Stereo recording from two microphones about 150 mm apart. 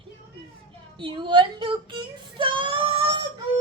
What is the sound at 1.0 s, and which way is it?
Child singing, 35° right (ahead or behind).